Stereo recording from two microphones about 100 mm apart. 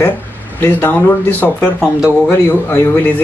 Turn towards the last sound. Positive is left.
turn(degrees=20)  # may be behind; listen again after turning